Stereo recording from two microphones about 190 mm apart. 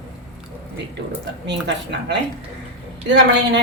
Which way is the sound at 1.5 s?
65° right (ahead or behind).